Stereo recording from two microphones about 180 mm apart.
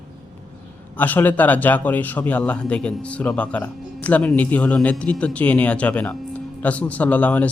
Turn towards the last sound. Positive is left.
turn(degrees=10)  # may be behind; listen again after turning